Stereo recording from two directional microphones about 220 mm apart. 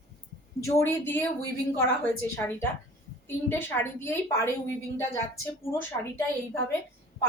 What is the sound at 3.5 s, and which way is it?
A woman's voice, 10° left (ahead or behind).